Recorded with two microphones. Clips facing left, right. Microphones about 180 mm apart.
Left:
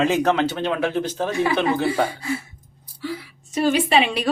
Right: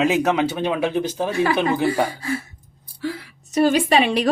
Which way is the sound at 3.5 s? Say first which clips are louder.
Right 2 dB; 40° right (ahead or behind).